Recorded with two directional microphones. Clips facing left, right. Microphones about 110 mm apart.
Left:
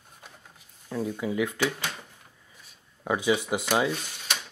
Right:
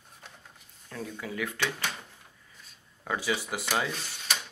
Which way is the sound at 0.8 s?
15° left (ahead or behind).